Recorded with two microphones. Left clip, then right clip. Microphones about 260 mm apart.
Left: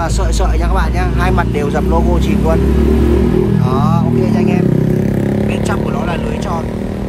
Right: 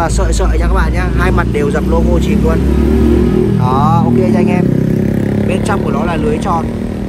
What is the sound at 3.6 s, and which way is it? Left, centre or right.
Speech, centre.